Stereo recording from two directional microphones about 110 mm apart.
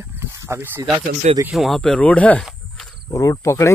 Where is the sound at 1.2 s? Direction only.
90° right.